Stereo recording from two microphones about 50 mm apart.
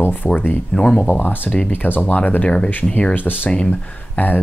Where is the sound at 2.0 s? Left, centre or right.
Left.